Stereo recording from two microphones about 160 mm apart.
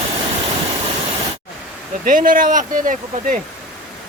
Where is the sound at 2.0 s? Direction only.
60° right (ahead or behind).